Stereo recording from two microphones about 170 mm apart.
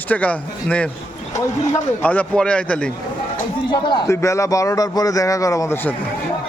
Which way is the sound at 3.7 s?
25° left (ahead or behind).